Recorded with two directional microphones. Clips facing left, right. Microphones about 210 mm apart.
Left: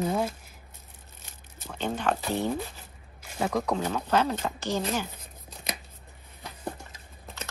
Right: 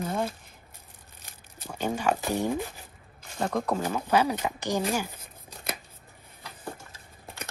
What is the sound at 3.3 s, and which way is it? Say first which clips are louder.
Speech: even; 5° left (ahead or behind).